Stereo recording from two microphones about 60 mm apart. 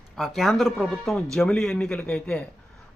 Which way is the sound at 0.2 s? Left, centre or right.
Centre.